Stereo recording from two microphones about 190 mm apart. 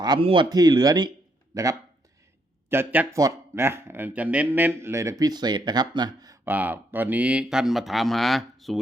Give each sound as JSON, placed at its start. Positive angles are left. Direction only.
{"t": 0.0, "sound": "speech", "side_deg": -25}